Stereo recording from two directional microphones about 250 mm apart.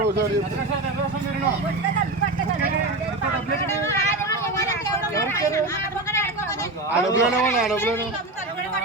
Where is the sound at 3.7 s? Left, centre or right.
Centre.